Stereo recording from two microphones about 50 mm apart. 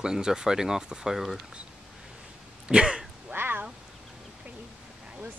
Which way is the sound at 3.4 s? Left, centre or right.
Right.